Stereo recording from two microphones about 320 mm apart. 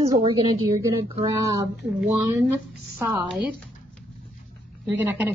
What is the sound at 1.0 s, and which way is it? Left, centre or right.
Speech, centre.